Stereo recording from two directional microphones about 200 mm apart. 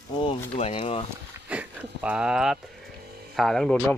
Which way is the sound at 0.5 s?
30° left (ahead or behind).